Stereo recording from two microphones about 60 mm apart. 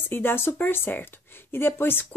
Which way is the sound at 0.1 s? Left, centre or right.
Left.